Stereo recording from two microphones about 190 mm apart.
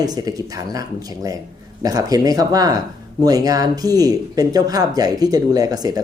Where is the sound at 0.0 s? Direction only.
20° right (ahead or behind).